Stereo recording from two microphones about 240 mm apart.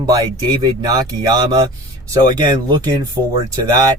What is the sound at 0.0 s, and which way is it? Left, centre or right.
Speech, centre.